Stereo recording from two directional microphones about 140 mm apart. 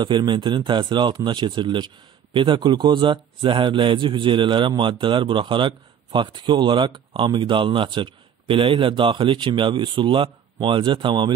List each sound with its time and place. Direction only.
0.0 s a man's voice: 35° right (ahead or behind)